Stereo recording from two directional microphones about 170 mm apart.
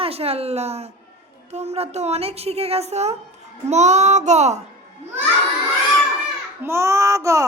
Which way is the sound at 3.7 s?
45° right (ahead or behind).